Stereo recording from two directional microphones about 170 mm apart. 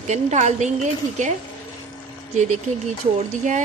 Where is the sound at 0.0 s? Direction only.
40° right (ahead or behind).